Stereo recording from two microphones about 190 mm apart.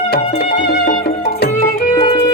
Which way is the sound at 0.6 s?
45° left (ahead or behind).